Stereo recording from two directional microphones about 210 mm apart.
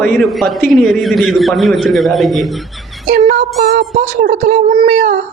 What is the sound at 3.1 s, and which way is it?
Speech, 40° right (ahead or behind).